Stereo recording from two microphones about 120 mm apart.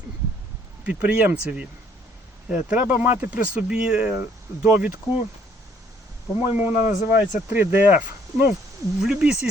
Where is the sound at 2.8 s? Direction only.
15° right (ahead or behind).